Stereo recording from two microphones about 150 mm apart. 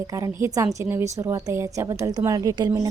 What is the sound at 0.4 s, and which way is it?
A woman's voice, 20° right (ahead or behind).